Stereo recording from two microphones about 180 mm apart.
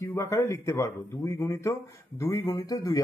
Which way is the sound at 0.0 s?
20° left (ahead or behind).